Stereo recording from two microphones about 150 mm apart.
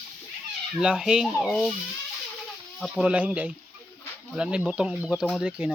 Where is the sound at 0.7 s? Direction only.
5° right (ahead or behind).